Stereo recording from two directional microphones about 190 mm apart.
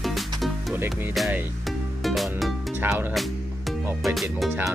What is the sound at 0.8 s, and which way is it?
Speech, 10° right (ahead or behind).